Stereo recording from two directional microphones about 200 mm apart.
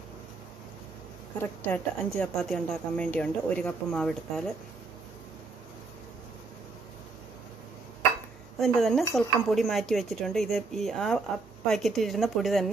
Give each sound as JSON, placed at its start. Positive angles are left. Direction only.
{"t": 1.4, "sound": "speech", "side_deg": 10}
{"t": 8.5, "sound": "speech", "side_deg": 0}